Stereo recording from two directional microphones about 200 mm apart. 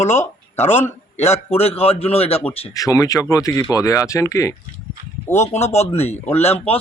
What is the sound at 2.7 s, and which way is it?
Speech, 15° left (ahead or behind).